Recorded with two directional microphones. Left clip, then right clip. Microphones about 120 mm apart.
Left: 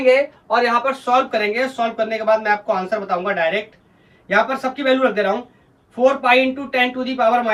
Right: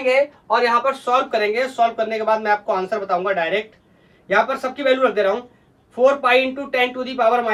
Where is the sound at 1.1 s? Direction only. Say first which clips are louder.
Left 1 dB; 25° right (ahead or behind).